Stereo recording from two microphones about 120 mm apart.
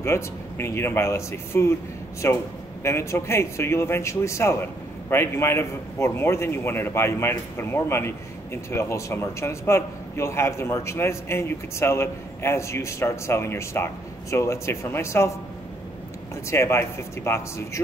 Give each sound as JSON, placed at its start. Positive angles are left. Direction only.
{"t": 0.0, "sound": "a man's voice", "side_deg": 20}
{"t": 16.4, "sound": "a man's voice", "side_deg": 20}